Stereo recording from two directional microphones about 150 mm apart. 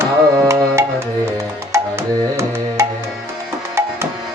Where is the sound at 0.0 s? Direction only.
15° right (ahead or behind).